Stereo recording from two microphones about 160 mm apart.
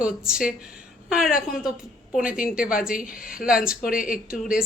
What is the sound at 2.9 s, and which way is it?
A woman's voice, 55° left (ahead or behind).